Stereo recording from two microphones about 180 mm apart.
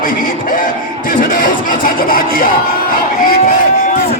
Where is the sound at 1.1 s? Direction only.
50° left (ahead or behind).